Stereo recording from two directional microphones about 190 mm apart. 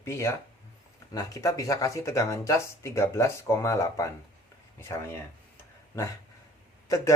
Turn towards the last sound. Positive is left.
turn(degrees=15)  # may be behind; listen again after turning